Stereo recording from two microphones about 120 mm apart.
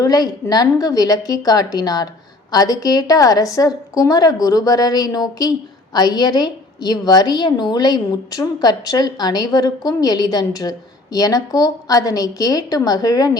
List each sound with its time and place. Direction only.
0.0 s a woman's voice: 30° left (ahead or behind)